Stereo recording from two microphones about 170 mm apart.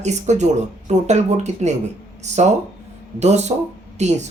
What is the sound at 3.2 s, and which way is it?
Speech, 40° right (ahead or behind).